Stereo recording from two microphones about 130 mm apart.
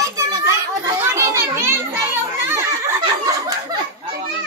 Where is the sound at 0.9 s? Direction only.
20° right (ahead or behind).